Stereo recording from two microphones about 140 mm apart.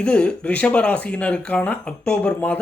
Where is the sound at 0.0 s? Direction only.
10° left (ahead or behind).